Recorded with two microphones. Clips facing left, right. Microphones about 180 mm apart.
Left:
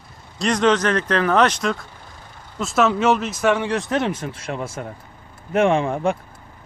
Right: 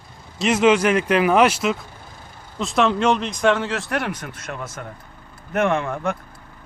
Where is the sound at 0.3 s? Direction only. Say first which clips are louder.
Right 2 dB; 5° right (ahead or behind); by 4.9 s 30° left (ahead or behind).